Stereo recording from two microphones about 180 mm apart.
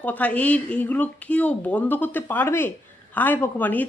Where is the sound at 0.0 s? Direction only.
10° left (ahead or behind).